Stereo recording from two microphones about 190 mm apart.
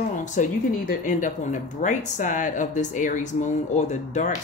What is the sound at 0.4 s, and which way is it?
Speech, 40° left (ahead or behind).